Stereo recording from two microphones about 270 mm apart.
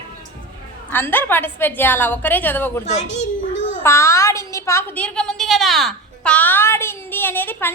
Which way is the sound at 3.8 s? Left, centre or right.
Centre.